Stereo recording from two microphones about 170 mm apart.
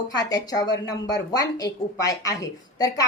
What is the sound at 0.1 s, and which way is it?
A woman's voice, 20° left (ahead or behind).